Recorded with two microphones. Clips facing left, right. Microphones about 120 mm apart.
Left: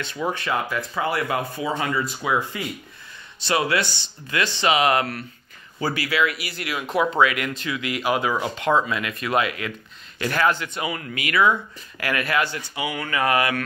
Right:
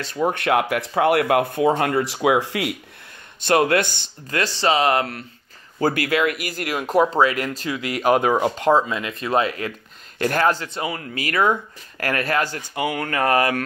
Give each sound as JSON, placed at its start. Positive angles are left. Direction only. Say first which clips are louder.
{"t": 0.0, "sound": "speech", "louder": "right 5 dB", "side_deg": -35}
{"t": 0.3, "sound": "speech", "louder": "right 5 dB", "side_deg": -65}
{"t": 3.3, "sound": "speech", "louder": "right 5 dB", "side_deg": -50}
{"t": 5.8, "sound": "speech", "louder": "right 3 dB", "side_deg": -50}
{"t": 8.8, "sound": "speech", "louder": "right 1 dB", "side_deg": -25}